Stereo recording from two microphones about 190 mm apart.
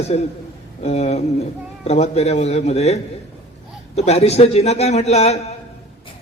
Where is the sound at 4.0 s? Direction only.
35° left (ahead or behind).